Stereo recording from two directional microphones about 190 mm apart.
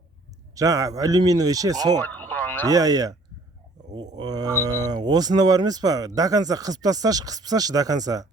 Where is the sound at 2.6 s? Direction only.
20° right (ahead or behind).